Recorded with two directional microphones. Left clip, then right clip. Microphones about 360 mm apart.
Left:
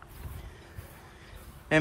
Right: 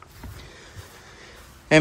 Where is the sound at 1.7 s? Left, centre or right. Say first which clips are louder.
Right 8 dB; centre.